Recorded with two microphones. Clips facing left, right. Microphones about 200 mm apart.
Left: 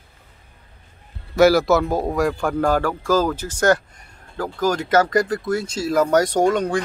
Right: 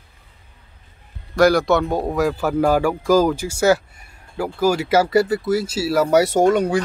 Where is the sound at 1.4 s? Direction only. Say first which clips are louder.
Left 1 dB; 5° left (ahead or behind).